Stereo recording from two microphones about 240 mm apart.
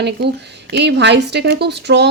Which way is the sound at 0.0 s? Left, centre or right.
Right.